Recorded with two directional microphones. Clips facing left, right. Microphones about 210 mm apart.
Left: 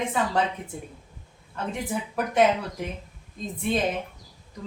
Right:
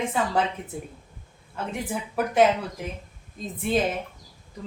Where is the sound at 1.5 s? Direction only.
Centre (ahead or behind).